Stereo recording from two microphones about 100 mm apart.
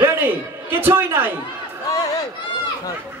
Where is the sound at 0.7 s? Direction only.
20° right (ahead or behind).